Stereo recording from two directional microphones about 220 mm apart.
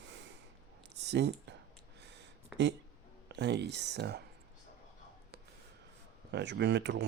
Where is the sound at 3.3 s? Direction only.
50° right (ahead or behind).